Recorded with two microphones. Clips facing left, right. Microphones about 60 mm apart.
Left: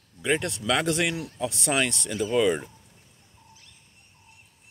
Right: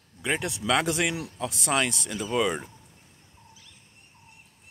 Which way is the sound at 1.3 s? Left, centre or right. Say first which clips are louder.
Left 1 dB; centre.